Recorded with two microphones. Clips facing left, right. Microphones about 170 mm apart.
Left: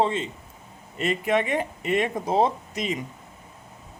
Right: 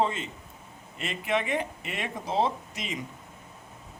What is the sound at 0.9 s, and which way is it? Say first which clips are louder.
Speech: left 6 dB; 45° left (ahead or behind).